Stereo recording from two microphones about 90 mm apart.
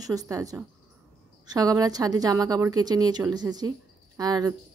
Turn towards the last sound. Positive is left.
turn(degrees=-45)  # may be behind; listen again after turning